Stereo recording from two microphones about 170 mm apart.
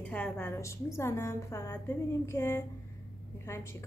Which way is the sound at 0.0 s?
10° left (ahead or behind).